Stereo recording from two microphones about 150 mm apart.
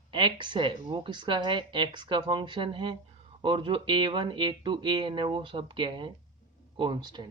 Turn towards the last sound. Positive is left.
turn(degrees=-30)  # may be behind; listen again after turning